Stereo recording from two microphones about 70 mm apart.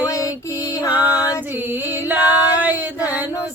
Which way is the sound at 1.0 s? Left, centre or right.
Left.